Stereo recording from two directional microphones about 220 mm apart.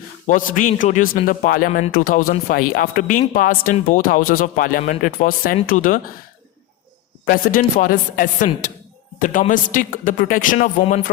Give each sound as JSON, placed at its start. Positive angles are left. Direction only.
{"t": 0.3, "sound": "speech", "side_deg": 35}
{"t": 7.3, "sound": "speech", "side_deg": 40}